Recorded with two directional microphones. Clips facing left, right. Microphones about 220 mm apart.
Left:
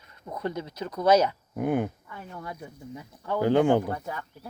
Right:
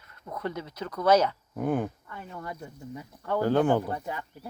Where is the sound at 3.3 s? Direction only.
15° left (ahead or behind).